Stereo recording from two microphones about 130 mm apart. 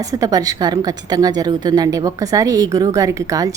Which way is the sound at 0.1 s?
25° right (ahead or behind).